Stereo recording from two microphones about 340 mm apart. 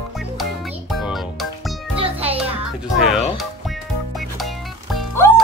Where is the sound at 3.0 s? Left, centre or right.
Centre.